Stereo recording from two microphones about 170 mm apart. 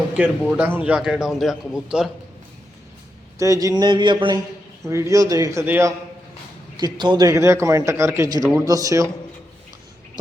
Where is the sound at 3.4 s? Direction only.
20° right (ahead or behind).